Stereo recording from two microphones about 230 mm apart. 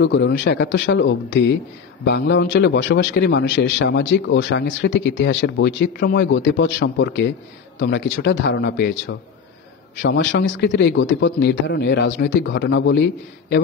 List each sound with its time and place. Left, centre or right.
0.0 s a man's voice: left